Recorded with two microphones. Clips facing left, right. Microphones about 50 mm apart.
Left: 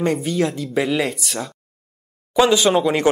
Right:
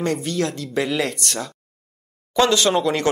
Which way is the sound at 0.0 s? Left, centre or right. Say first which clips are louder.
Left 3 dB; centre.